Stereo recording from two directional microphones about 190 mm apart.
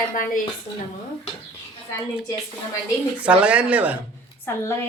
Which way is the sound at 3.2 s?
5° right (ahead or behind).